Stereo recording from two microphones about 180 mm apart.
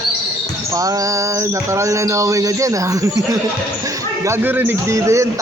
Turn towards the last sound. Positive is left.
turn(degrees=-15)  # may be behind; listen again after turning